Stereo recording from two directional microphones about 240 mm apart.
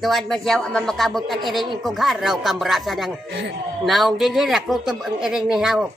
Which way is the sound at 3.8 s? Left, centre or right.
Centre.